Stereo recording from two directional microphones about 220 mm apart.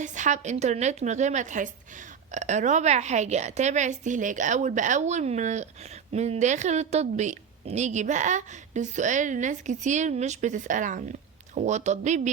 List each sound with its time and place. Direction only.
0.0 s a woman's voice: 35° right (ahead or behind)